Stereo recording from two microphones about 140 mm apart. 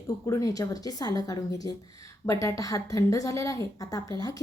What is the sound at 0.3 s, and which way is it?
Speech, 25° left (ahead or behind).